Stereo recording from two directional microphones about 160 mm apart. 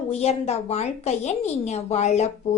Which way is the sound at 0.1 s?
40° left (ahead or behind).